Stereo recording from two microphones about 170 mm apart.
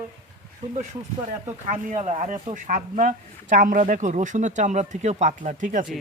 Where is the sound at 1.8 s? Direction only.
40° right (ahead or behind).